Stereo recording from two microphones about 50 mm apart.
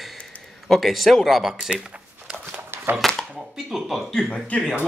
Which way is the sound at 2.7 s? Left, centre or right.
Right.